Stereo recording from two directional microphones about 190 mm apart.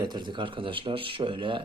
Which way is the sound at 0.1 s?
25° right (ahead or behind).